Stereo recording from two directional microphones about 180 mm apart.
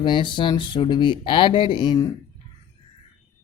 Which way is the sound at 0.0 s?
25° left (ahead or behind).